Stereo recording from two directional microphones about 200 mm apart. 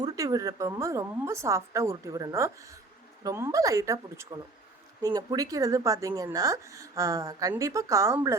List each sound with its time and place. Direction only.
0.0 s a woman's voice: 15° right (ahead or behind)